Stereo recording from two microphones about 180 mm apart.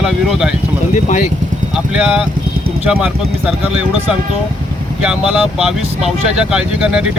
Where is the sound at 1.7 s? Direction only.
5° right (ahead or behind).